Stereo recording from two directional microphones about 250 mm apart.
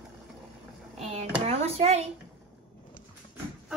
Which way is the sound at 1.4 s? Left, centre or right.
Right.